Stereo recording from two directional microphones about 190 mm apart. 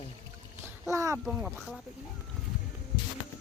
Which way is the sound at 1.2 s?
Centre (ahead or behind).